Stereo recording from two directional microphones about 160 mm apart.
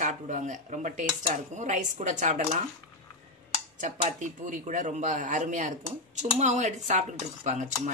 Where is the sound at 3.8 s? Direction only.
50° right (ahead or behind).